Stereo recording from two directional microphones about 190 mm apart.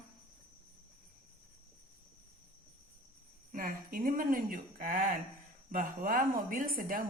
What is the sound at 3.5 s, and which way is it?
Speech, 45° right (ahead or behind).